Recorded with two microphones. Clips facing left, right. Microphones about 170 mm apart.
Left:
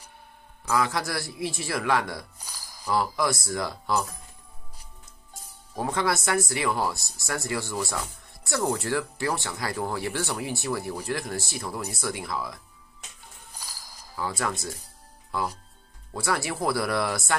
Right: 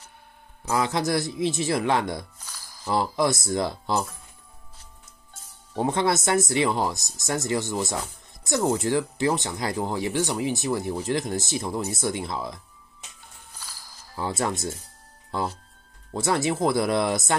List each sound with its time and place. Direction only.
0.7 s speech: 25° right (ahead or behind)
5.8 s speech: 25° right (ahead or behind)
14.1 s speech: 25° right (ahead or behind)
16.1 s speech: 25° right (ahead or behind)